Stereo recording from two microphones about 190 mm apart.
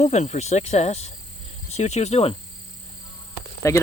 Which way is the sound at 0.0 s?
35° left (ahead or behind).